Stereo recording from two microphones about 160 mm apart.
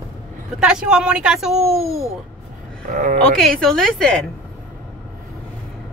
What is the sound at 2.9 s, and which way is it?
Speech, 50° right (ahead or behind).